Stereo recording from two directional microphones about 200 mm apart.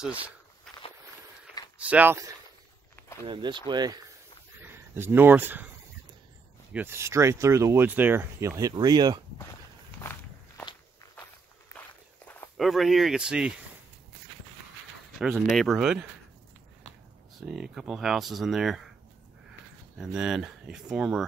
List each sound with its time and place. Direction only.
1.8 s speech: 5° right (ahead or behind)
3.3 s speech: 25° right (ahead or behind)
6.7 s speech: 10° right (ahead or behind)
11.7 s walk: 15° left (ahead or behind)
12.5 s speech: centre (ahead or behind)
15.1 s speech: centre (ahead or behind)
17.6 s speech: centre (ahead or behind)
20.0 s speech: 5° right (ahead or behind)